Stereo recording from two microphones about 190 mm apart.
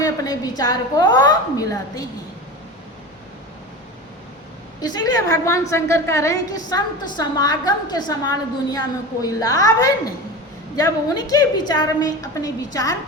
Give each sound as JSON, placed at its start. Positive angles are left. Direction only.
{"t": 0.0, "sound": "a woman's voice", "side_deg": 20}
{"t": 4.8, "sound": "a woman's voice", "side_deg": 20}